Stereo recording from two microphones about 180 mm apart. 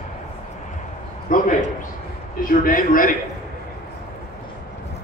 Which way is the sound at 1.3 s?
50° left (ahead or behind).